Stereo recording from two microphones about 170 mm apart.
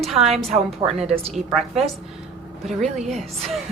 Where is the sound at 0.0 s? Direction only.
Centre (ahead or behind).